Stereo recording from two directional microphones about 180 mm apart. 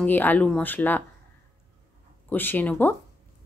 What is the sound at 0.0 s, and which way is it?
Speech, 10° left (ahead or behind).